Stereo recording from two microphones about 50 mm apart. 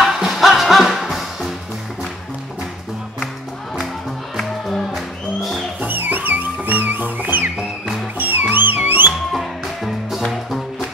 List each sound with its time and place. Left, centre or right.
0.0 s music: centre
4.4 s music: centre
5.8 s music: right
9.3 s music: centre